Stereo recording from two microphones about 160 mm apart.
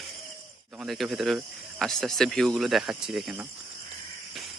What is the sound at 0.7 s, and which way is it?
Speech, centre (ahead or behind).